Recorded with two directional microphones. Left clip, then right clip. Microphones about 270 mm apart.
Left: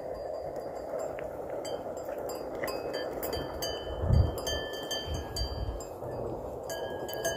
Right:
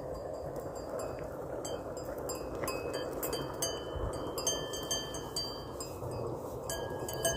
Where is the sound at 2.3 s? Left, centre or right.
Right.